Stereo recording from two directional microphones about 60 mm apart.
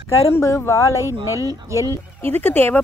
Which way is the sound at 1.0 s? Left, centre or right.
Right.